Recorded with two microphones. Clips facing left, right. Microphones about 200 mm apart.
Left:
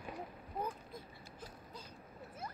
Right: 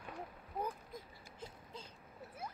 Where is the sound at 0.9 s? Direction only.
25° right (ahead or behind).